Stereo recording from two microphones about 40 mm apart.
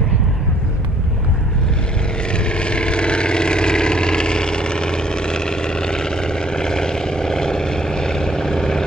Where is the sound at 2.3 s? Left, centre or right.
Left.